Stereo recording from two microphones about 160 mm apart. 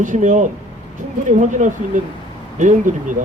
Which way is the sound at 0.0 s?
50° right (ahead or behind).